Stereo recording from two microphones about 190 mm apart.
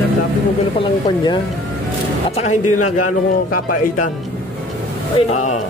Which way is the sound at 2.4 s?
40° left (ahead or behind).